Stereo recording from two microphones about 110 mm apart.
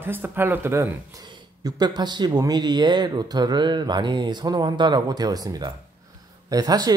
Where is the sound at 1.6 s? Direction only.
40° right (ahead or behind).